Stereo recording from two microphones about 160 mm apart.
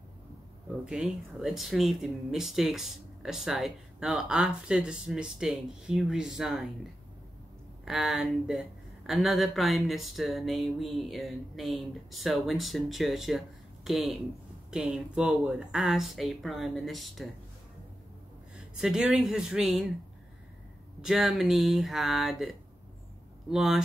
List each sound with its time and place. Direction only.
0.8 s speech: 5° right (ahead or behind)
18.8 s speech: 5° right (ahead or behind)
21.0 s speech: centre (ahead or behind)